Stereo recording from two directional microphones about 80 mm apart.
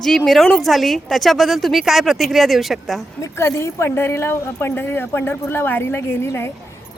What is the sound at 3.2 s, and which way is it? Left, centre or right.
Speech, left.